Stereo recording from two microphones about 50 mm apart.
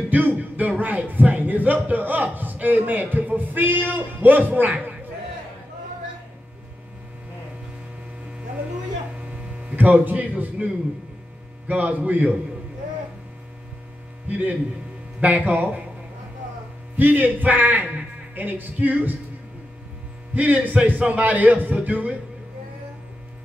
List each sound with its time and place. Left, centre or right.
0.1 s speech: right
9.3 s hum: right
10.0 s speech: right
14.2 s speech: right
16.9 s speech: right
20.3 s speech: right